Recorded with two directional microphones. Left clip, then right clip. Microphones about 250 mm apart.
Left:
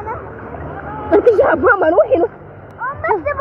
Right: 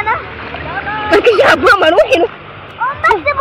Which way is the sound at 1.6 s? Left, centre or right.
Centre.